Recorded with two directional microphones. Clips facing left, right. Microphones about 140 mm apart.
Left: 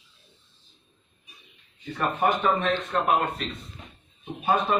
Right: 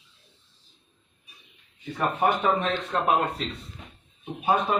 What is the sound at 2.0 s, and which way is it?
Speech, 15° right (ahead or behind).